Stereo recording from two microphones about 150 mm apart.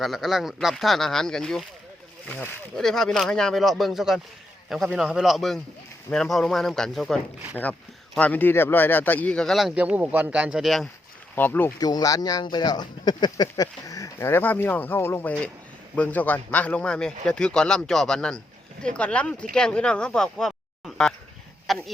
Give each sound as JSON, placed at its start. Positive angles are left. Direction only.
{"t": 0.0, "sound": "speech", "side_deg": 0}
{"t": 11.3, "sound": "speech", "side_deg": 10}
{"t": 11.8, "sound": "speech", "side_deg": 25}